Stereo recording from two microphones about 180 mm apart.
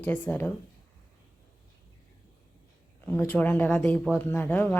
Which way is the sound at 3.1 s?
10° left (ahead or behind).